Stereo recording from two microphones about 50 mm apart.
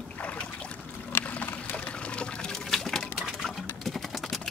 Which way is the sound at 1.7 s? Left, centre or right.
Left.